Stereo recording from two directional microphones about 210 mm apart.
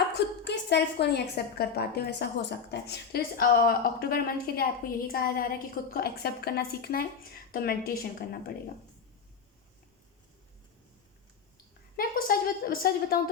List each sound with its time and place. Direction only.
0.1 s a woman's voice: 55° left (ahead or behind)
11.9 s a woman's voice: 45° left (ahead or behind)